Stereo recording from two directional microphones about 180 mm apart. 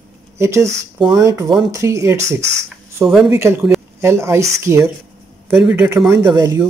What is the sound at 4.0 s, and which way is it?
Speech, 15° right (ahead or behind).